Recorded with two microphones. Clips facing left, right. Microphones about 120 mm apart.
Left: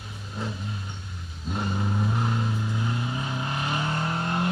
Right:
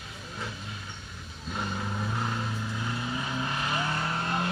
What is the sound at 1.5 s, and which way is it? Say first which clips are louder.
Vehicle: left 4 dB; 15° left (ahead or behind).